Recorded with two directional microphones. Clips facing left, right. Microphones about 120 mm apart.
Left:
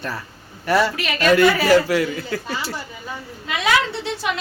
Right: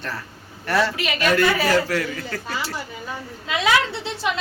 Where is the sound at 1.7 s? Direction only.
10° left (ahead or behind).